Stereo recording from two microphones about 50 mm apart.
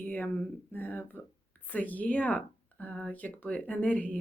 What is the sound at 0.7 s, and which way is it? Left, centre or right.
Speech, left.